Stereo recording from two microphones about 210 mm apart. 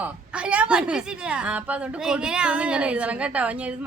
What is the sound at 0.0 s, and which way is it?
A woman's voice, 5° right (ahead or behind).